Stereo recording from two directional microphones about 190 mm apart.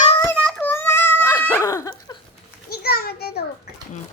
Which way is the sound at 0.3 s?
5° left (ahead or behind).